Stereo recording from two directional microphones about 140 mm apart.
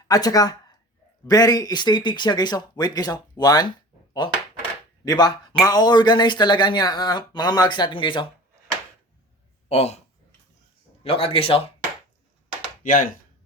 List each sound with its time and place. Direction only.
0.1 s speech: 25° left (ahead or behind)
5.0 s speech: 30° left (ahead or behind)
9.6 s speech: 50° left (ahead or behind)
11.0 s speech: 40° left (ahead or behind)
12.8 s speech: 75° left (ahead or behind)